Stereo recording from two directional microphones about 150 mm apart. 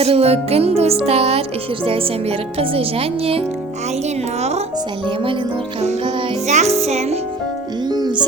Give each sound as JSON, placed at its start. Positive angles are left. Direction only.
{"t": 0.0, "sound": "speech", "side_deg": -40}
{"t": 6.5, "sound": "music", "side_deg": -45}
{"t": 7.9, "sound": "music", "side_deg": -30}